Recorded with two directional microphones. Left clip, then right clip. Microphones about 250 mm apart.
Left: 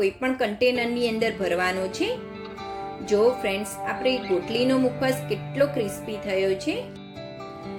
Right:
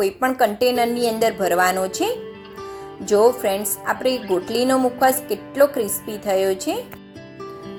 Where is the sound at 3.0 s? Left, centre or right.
Centre.